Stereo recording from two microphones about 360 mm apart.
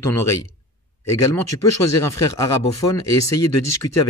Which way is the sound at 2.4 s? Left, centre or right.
Centre.